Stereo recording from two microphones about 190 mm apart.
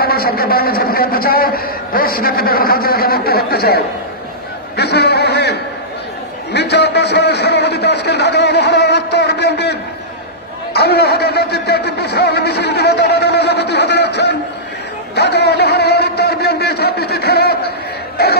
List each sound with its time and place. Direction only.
0.0 s a man's voice: 55° left (ahead or behind)